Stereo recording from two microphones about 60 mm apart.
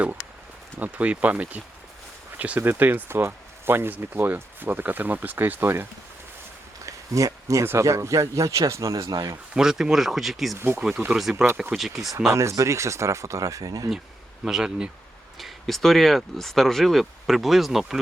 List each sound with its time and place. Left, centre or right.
0.8 s speech: right
3.1 s speech: right
6.8 s a sound: right
7.8 s speech: right
9.6 s speech: centre
10.6 s speech: right
11.2 s speech: centre
12.3 s speech: right
14.4 s speech: centre